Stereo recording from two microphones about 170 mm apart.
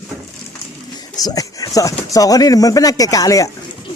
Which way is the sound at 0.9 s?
25° left (ahead or behind).